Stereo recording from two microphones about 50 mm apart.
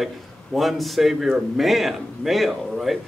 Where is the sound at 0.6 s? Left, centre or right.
Centre.